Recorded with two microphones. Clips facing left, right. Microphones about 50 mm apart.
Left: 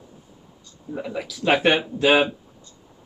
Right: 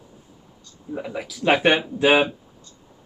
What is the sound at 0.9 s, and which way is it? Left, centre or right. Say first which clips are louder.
Speech: even; centre.